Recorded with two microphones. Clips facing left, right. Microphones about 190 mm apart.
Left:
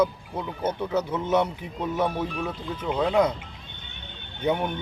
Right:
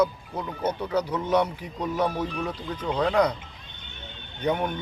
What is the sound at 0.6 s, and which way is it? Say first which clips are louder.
Speech: even; 25° left (ahead or behind).